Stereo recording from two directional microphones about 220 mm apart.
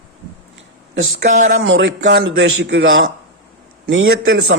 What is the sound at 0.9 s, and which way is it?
Speech, 60° right (ahead or behind).